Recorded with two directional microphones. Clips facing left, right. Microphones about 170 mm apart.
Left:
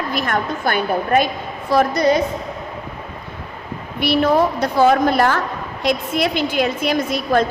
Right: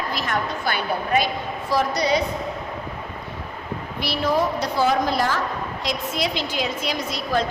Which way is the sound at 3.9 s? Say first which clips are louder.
Left 7 dB; 55° left (ahead or behind).